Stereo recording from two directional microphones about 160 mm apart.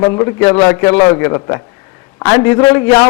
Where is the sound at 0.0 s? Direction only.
20° left (ahead or behind).